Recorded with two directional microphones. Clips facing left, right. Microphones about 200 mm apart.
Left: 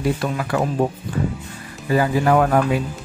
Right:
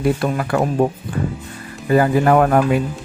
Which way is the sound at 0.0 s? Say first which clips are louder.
Right 3 dB; 55° right (ahead or behind).